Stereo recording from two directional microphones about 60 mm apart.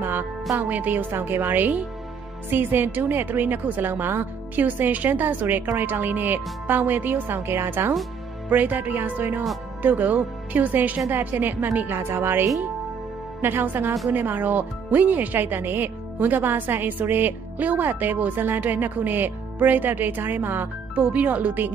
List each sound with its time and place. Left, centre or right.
0.6 s a woman's voice: right
8.5 s a woman's voice: right